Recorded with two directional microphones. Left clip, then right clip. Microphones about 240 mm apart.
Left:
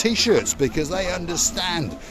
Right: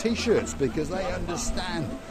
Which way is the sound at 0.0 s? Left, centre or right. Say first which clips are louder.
Left 6 dB; left.